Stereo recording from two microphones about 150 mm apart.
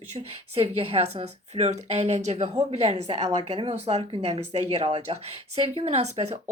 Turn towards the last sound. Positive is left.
turn(degrees=-45)  # may be behind; listen again after turning